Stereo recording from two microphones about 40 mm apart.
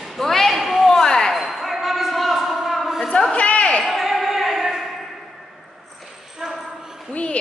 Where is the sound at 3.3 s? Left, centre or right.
Left.